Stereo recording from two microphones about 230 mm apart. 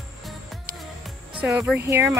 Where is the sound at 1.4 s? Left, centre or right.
Centre.